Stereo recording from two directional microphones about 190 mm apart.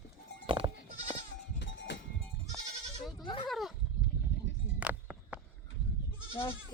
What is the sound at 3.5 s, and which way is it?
Goat, centre (ahead or behind).